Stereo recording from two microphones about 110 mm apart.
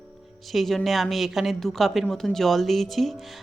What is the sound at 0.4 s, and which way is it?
Speech, centre (ahead or behind).